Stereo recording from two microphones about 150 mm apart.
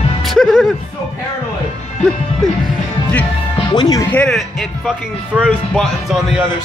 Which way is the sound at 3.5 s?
30° left (ahead or behind).